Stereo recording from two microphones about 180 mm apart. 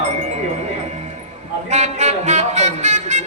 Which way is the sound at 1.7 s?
40° right (ahead or behind).